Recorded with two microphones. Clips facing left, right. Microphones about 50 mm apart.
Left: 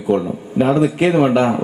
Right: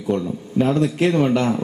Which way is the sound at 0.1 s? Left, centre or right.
Left.